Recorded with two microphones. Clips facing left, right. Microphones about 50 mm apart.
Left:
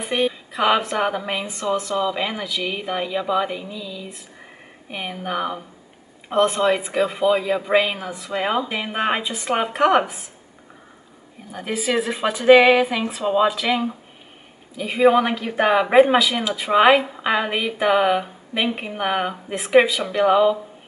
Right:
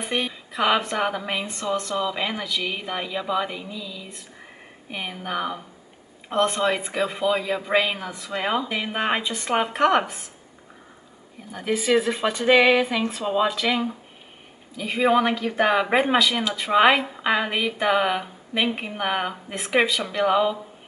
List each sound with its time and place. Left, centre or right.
0.0 s a woman's voice: centre
11.5 s a woman's voice: centre